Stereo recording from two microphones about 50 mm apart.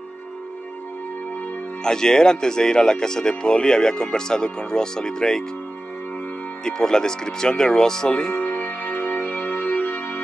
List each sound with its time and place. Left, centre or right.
1.8 s speech: centre
6.6 s speech: centre
8.4 s music: left